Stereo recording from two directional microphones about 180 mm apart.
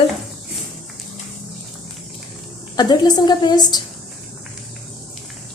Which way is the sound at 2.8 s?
25° left (ahead or behind).